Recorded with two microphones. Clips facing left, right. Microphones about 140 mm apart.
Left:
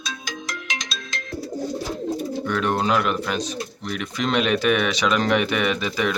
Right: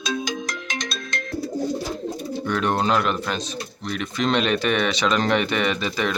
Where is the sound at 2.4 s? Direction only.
Centre (ahead or behind).